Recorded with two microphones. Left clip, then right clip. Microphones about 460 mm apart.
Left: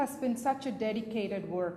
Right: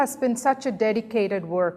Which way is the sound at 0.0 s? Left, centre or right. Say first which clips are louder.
Right 9 dB; right.